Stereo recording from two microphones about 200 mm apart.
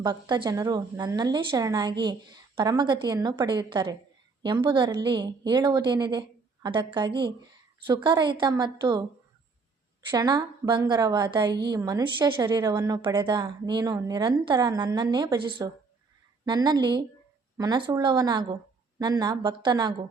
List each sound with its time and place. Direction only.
0.0 s a woman's voice: 25° right (ahead or behind)
10.1 s a woman's voice: 20° right (ahead or behind)